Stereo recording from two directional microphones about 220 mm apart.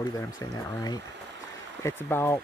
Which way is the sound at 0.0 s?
15° left (ahead or behind).